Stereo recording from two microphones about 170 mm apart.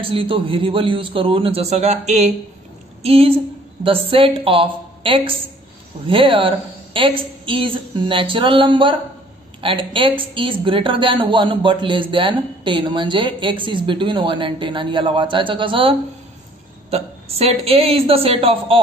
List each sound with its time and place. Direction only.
0.0 s a woman's voice: 30° right (ahead or behind)